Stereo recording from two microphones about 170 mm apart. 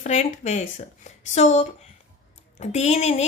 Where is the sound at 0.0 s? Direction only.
45° left (ahead or behind).